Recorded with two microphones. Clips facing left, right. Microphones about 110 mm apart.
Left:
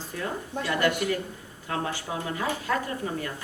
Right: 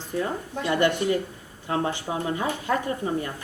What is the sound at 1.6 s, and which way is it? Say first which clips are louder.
A woman's voice: right 4 dB; 25° right (ahead or behind).